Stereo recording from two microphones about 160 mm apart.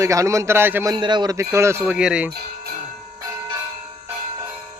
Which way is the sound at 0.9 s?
30° right (ahead or behind).